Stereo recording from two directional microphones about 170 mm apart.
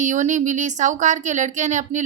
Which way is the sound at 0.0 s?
45° right (ahead or behind).